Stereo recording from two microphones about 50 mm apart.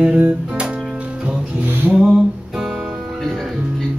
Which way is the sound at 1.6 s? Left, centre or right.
Right.